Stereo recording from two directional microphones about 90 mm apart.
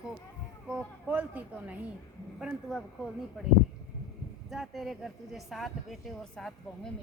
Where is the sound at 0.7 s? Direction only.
15° right (ahead or behind).